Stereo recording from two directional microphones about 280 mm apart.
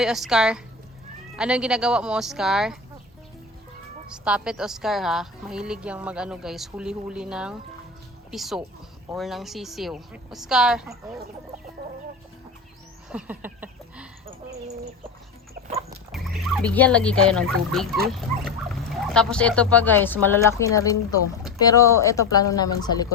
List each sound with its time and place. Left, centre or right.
0.0 s a woman's voice: centre
4.1 s a woman's voice: centre
13.1 s a sound: centre
15.5 s dog: right
16.1 s a woman's voice: centre